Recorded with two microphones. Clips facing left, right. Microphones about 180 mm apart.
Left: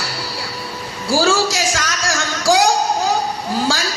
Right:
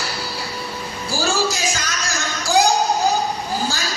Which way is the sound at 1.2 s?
90° left.